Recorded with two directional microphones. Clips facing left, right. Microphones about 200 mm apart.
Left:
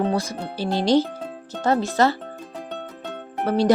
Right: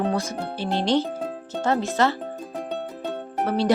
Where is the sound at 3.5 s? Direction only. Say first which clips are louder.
Left 4 dB; 40° left (ahead or behind).